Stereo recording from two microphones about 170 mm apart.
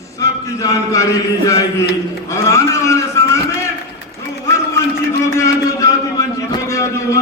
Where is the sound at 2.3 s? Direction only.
15° left (ahead or behind).